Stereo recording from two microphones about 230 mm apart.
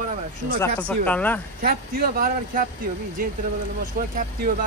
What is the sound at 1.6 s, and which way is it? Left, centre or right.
Speech, right.